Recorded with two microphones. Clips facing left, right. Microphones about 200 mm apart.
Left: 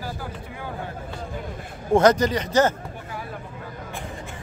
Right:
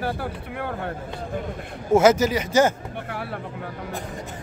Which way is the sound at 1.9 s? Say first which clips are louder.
Right 1 dB; 5° right (ahead or behind).